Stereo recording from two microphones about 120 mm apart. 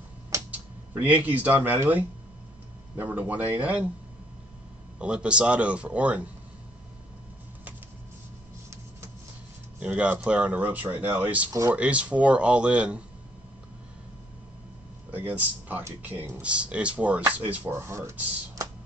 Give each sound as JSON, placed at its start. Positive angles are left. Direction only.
{"t": 0.5, "sound": "speech", "side_deg": -15}
{"t": 4.9, "sound": "speech", "side_deg": -10}
{"t": 9.8, "sound": "speech", "side_deg": -10}
{"t": 15.0, "sound": "speech", "side_deg": -15}